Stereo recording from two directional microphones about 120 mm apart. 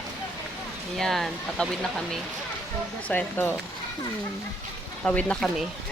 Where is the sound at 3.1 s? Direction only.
15° left (ahead or behind).